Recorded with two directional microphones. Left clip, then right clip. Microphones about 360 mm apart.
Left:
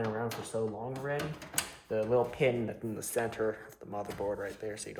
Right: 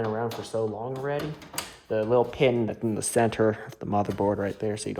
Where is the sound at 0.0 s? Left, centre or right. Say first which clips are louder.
Right 6 dB; right.